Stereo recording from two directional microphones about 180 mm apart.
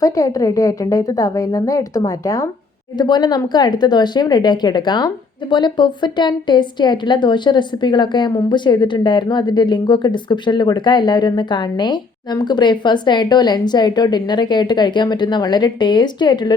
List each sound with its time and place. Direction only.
0.0 s a woman's voice: 20° left (ahead or behind)